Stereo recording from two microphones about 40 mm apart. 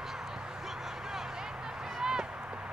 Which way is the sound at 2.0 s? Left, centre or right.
Centre.